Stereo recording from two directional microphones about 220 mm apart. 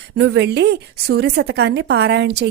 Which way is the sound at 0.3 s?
50° right (ahead or behind).